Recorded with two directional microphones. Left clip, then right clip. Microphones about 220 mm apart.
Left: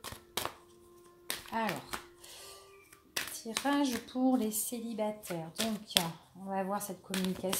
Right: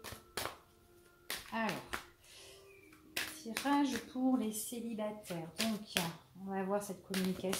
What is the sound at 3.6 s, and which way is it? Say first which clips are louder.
Speech: left 2 dB; 45° left (ahead or behind).